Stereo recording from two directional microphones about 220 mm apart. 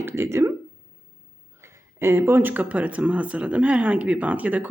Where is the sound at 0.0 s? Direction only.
10° right (ahead or behind).